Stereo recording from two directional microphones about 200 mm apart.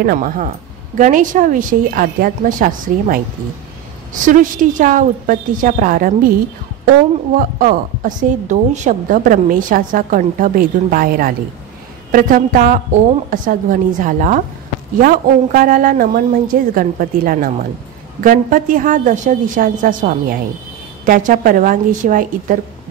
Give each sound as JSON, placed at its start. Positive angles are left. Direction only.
{"t": 0.0, "sound": "a woman's voice", "side_deg": -45}
{"t": 7.3, "sound": "a woman's voice", "side_deg": -45}